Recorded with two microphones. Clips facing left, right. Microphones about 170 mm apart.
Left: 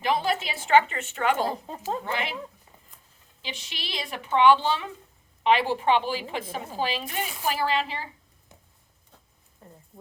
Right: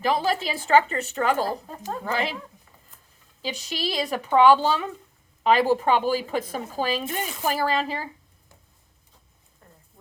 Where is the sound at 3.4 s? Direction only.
40° right (ahead or behind).